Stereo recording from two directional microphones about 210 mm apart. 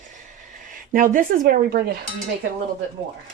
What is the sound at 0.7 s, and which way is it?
Speech, 40° right (ahead or behind).